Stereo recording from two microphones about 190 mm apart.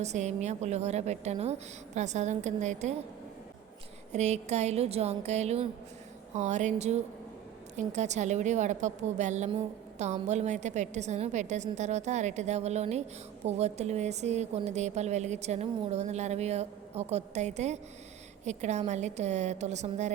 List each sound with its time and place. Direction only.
0.0 s a woman's voice: 35° right (ahead or behind)
4.1 s a woman's voice: 35° right (ahead or behind)